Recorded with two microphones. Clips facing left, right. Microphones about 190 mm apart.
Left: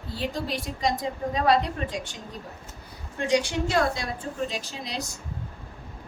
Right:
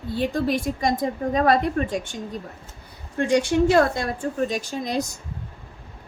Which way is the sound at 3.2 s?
55° right (ahead or behind).